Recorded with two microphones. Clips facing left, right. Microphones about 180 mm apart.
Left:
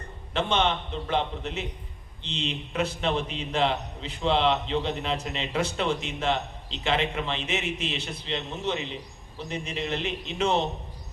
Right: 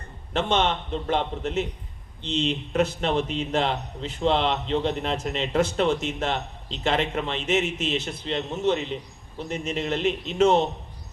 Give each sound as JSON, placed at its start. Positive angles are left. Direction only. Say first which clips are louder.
{"t": 0.3, "sound": "a man's voice", "louder": "right 2 dB", "side_deg": -45}